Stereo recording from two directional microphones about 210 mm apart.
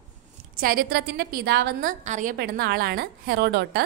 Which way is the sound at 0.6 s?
45° right (ahead or behind).